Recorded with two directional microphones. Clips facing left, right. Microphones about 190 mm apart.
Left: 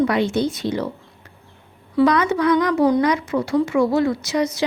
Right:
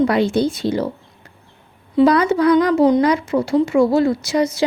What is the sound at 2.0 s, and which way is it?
Speech, 30° right (ahead or behind).